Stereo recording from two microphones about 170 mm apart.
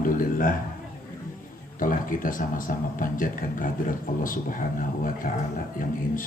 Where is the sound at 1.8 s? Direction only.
55° left (ahead or behind).